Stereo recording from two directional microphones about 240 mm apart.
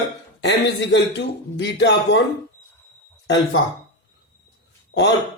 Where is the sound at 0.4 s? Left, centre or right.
Left.